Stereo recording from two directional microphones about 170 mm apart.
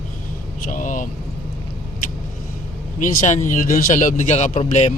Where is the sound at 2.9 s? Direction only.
45° left (ahead or behind).